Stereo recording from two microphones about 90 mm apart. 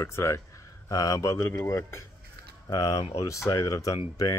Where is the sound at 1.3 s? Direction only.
25° left (ahead or behind).